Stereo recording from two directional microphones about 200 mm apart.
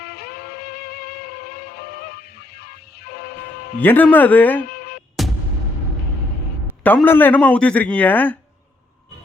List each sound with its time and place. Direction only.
0.0 s music: 50° left (ahead or behind)
3.8 s a man's voice: 10° left (ahead or behind)
4.7 s music: 50° left (ahead or behind)
5.2 s music: centre (ahead or behind)
6.8 s a man's voice: 10° left (ahead or behind)